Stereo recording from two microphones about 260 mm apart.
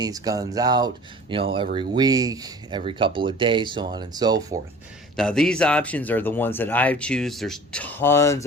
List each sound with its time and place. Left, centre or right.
0.0 s speech: centre
5.1 s speech: centre